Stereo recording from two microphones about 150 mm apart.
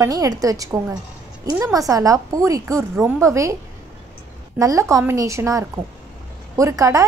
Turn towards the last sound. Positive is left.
turn(degrees=-20)  # may be behind; listen again after turning